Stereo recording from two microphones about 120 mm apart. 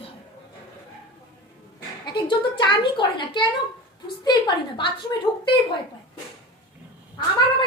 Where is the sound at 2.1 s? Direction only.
40° left (ahead or behind).